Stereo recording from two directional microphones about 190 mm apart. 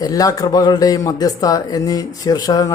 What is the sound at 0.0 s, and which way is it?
Speech, 20° left (ahead or behind).